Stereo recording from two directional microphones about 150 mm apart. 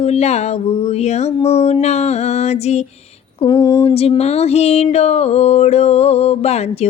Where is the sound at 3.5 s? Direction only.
25° left (ahead or behind).